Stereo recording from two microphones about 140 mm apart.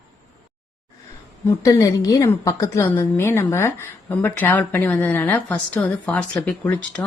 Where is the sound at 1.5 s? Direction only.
25° left (ahead or behind).